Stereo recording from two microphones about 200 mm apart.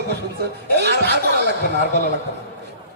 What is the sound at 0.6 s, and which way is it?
Speech, 60° right (ahead or behind).